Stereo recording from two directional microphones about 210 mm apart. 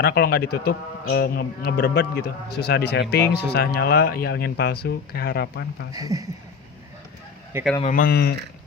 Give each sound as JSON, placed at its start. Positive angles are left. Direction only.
{"t": 0.0, "sound": "speech", "side_deg": 50}
{"t": 5.9, "sound": "speech", "side_deg": -15}
{"t": 7.8, "sound": "speech", "side_deg": 40}